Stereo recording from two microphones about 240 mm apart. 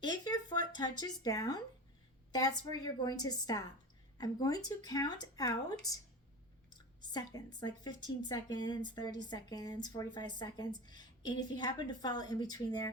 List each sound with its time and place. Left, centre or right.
0.0 s speech: centre